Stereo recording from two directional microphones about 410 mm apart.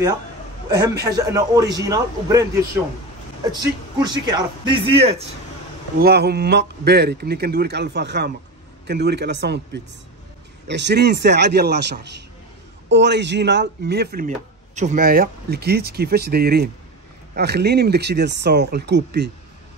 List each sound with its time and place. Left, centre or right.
0.7 s a man's voice: centre; by 19.3 s right